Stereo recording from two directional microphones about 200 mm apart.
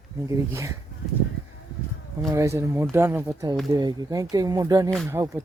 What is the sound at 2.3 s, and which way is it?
Speech, 15° right (ahead or behind).